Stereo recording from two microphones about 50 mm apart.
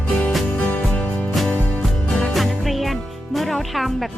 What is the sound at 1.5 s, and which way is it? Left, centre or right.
Music, left.